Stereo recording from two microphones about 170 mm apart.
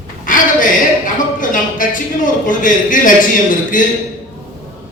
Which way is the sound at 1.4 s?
50° left (ahead or behind).